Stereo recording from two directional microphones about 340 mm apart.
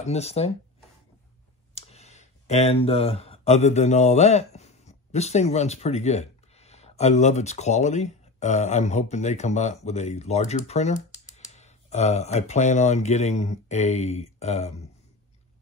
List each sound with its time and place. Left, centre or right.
0.0 s speech: centre
1.8 s speech: centre